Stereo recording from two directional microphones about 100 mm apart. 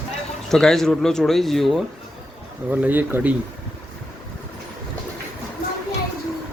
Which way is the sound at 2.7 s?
20° right (ahead or behind).